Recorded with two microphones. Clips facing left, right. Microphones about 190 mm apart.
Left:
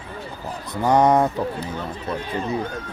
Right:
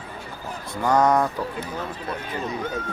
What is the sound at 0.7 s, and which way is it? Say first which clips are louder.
Speech: left 3 dB; 20° left (ahead or behind).